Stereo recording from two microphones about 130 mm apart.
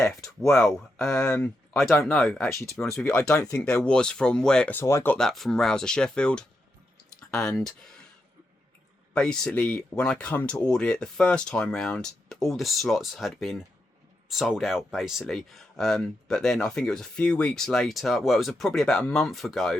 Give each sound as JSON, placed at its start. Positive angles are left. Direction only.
{"t": 0.5, "sound": "speech", "side_deg": 5}
{"t": 1.9, "sound": "speech", "side_deg": 20}
{"t": 2.1, "sound": "speech", "side_deg": 5}
{"t": 2.8, "sound": "speech", "side_deg": 20}
{"t": 3.6, "sound": "speech", "side_deg": 5}
{"t": 5.1, "sound": "speech", "side_deg": 0}
{"t": 9.1, "sound": "speech", "side_deg": 5}